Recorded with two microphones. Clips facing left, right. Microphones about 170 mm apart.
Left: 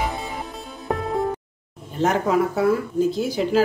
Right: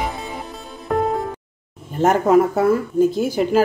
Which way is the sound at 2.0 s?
50° right (ahead or behind).